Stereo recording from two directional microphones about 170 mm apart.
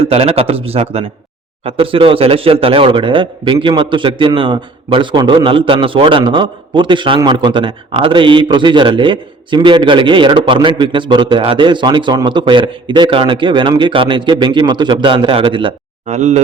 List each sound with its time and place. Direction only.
0.0 s a man's voice: 35° right (ahead or behind)
16.0 s speech: 40° right (ahead or behind)